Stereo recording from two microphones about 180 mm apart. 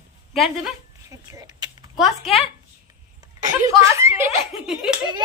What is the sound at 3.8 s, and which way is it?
Speech, 15° right (ahead or behind).